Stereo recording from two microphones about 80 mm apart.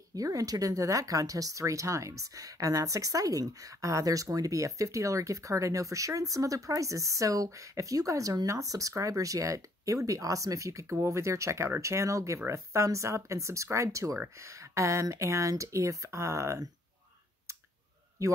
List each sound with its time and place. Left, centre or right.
0.1 s speech: right